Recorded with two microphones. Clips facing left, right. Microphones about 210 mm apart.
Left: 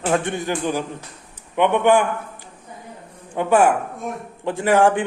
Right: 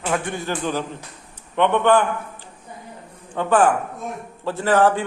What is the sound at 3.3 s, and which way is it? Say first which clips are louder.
Speech: left 1 dB; 10° left (ahead or behind).